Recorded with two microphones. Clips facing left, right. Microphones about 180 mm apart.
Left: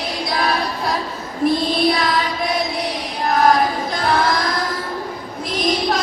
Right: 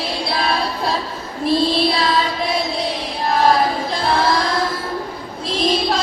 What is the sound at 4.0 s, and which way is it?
Singing, 30° right (ahead or behind).